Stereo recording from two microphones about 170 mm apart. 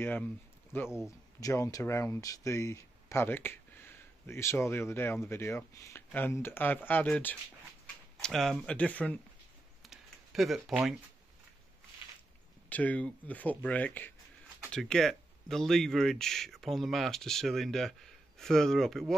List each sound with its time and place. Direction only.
0.0 s speech: 10° left (ahead or behind)
0.8 s speech: 5° right (ahead or behind)
1.4 s speech: 20° left (ahead or behind)
9.8 s a sound: centre (ahead or behind)
12.6 s speech: 10° left (ahead or behind)